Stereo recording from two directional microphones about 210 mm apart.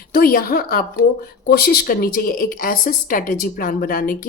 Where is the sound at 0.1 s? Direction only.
45° left (ahead or behind).